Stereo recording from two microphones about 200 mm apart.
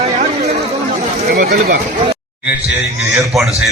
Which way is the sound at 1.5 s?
35° right (ahead or behind).